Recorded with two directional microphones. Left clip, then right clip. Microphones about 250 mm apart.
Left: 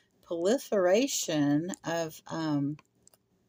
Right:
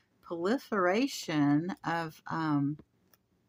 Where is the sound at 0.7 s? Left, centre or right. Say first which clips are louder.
Left 3 dB; centre.